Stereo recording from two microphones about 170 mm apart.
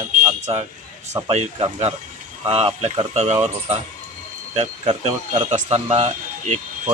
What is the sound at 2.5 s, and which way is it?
Speech, 35° right (ahead or behind).